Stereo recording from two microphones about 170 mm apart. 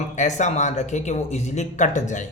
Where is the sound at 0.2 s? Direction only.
45° left (ahead or behind).